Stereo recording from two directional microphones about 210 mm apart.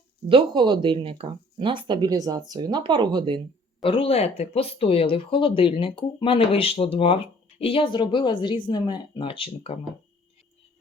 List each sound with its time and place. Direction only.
0.3 s speech: 25° right (ahead or behind)
3.8 s speech: 25° left (ahead or behind)